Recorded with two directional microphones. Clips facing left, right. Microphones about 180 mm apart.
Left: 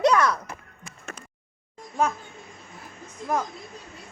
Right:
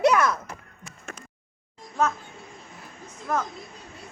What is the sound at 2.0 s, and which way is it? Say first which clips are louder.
Speech: even; 10° left (ahead or behind).